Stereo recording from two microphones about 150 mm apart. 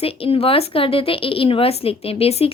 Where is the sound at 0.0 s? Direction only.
40° left (ahead or behind).